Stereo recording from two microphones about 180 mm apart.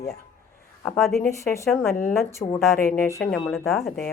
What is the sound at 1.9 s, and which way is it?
Speech, 45° left (ahead or behind).